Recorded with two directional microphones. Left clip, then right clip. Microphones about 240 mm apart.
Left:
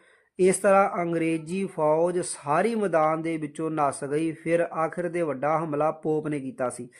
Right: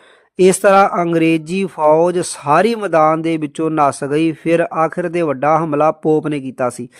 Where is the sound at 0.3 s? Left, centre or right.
Right.